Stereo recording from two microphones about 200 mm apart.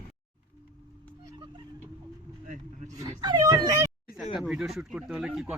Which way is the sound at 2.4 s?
35° right (ahead or behind).